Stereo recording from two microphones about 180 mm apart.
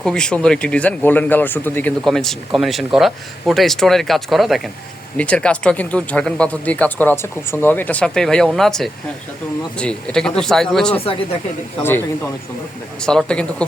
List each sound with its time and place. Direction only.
0.0 s speech: 5° left (ahead or behind)
11.0 s speech: 30° left (ahead or behind)
11.8 s speech: 15° left (ahead or behind)